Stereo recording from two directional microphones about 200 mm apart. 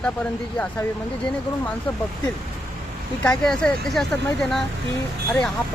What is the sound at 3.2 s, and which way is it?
Speech, 5° left (ahead or behind).